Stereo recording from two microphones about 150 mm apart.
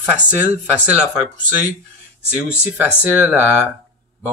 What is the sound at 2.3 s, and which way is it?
Speech, 5° right (ahead or behind).